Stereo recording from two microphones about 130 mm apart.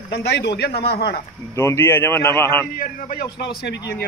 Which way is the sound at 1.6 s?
20° left (ahead or behind).